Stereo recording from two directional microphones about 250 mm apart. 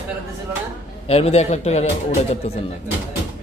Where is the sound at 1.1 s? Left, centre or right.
Left.